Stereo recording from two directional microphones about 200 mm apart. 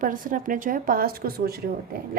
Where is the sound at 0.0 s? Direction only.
40° right (ahead or behind).